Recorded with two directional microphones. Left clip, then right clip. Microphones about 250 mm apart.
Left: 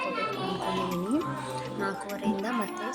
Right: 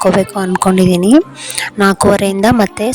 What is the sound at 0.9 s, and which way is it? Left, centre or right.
Speech, right.